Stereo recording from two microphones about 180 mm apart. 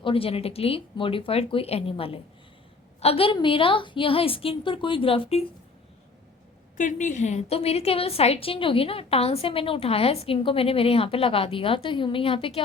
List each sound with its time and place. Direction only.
0.0 s a woman's voice: 30° left (ahead or behind)
6.7 s a woman's voice: 45° left (ahead or behind)